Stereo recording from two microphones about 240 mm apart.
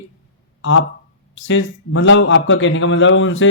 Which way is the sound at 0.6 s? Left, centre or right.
Left.